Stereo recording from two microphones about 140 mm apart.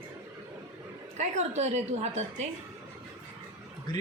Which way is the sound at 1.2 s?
55° right (ahead or behind).